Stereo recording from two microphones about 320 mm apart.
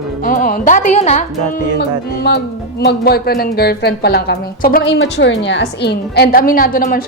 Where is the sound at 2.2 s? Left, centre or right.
Left.